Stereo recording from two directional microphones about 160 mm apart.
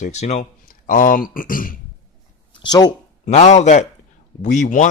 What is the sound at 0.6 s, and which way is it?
Speech, 60° left (ahead or behind).